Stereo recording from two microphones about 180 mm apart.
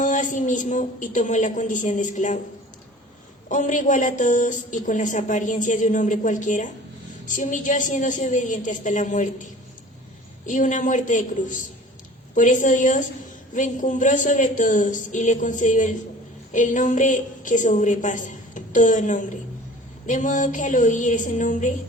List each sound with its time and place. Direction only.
0.0 s a woman's voice: 45° left (ahead or behind)
3.5 s speech: 45° left (ahead or behind)
10.4 s a woman's voice: 45° left (ahead or behind)